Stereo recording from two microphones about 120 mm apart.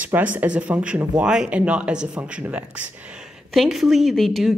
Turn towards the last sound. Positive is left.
turn(degrees=0)  # may be behind; listen again after turning